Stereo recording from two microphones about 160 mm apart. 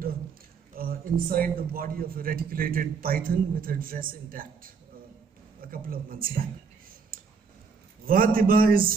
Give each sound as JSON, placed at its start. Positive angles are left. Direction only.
{"t": 0.7, "sound": "a man's voice", "side_deg": -65}
{"t": 7.1, "sound": "clicking", "side_deg": -65}
{"t": 8.1, "sound": "a man's voice", "side_deg": -65}